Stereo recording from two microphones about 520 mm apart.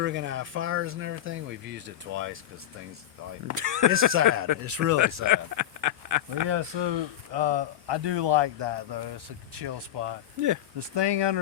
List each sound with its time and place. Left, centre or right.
0.0 s speech: centre
3.4 s a man's voice: right
6.5 s speech: right
10.4 s a man's voice: right
10.8 s speech: right